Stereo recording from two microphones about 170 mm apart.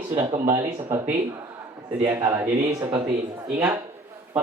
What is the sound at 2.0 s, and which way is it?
Speech, 20° right (ahead or behind).